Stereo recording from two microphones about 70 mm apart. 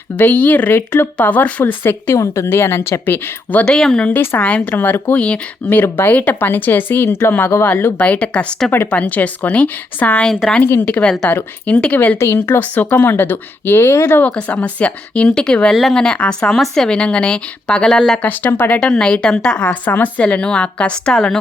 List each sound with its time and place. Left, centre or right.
0.2 s speech: left
1.8 s a woman's voice: left
2.1 s a woman's voice: left
3.7 s a woman's voice: centre
4.1 s a woman's voice: left
4.4 s speech: left
5.8 s a woman's voice: left
10.2 s a woman's voice: centre
11.3 s speech: left
12.2 s a woman's voice: left
12.5 s speech: left
14.3 s a woman's voice: centre
18.2 s speech: left
18.8 s a woman's voice: centre